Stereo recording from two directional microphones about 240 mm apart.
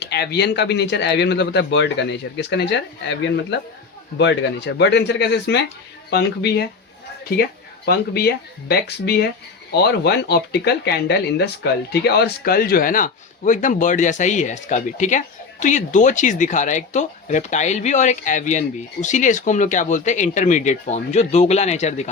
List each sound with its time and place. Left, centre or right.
0.0 s speech: left
7.9 s speech: left